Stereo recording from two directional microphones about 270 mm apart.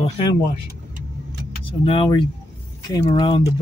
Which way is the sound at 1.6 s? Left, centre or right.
Centre.